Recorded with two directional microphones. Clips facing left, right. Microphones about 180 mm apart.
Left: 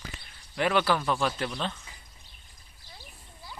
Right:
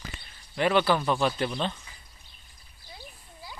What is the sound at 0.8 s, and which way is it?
Speech, 15° right (ahead or behind).